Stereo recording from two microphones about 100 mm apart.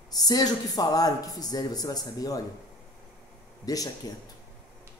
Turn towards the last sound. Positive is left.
turn(degrees=40)  # may be behind; listen again after turning